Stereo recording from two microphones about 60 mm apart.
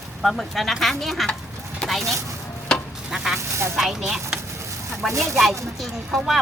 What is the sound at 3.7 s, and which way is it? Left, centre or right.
Speech, centre.